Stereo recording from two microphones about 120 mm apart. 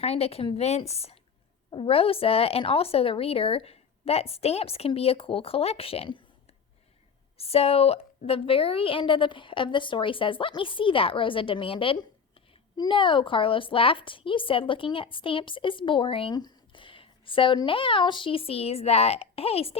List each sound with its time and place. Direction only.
0.0 s a child's voice: 60° left (ahead or behind)
7.3 s a woman's voice: 55° left (ahead or behind)
16.3 s a sound: 35° left (ahead or behind)
17.7 s a child's voice: 45° left (ahead or behind)